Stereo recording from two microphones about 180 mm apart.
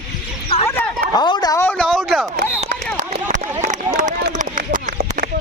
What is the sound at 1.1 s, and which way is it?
A man's voice, 25° left (ahead or behind).